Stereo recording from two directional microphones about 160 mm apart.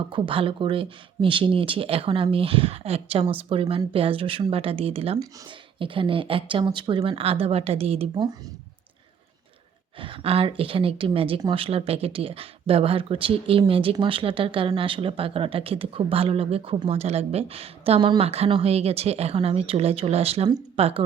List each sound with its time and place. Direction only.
0.1 s speech: 35° right (ahead or behind)
10.0 s speech: 35° right (ahead or behind)